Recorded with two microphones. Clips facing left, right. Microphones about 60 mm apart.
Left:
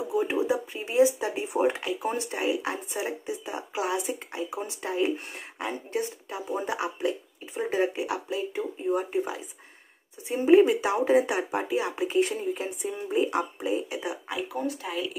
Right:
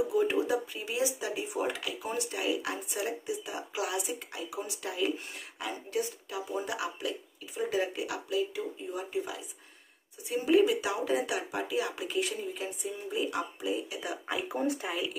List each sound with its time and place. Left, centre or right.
0.2 s speech: centre
0.7 s speech: left
10.2 s speech: left
14.3 s speech: centre